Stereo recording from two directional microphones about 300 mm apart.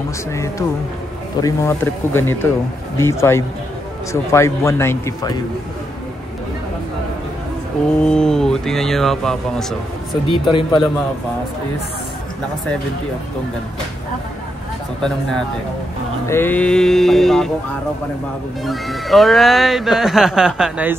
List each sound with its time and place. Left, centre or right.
0.3 s a man's voice: centre
8.0 s speech: centre
10.2 s a man's voice: centre
15.0 s speech: centre
18.6 s speech: centre